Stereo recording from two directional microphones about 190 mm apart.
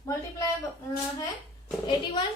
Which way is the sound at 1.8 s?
25° left (ahead or behind).